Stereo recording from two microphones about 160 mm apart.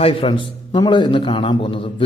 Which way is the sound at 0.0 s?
35° left (ahead or behind).